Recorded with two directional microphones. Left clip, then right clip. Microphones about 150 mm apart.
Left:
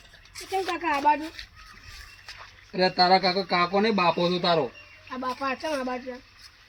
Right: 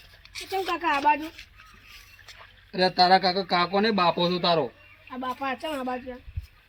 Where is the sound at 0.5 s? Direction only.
10° left (ahead or behind).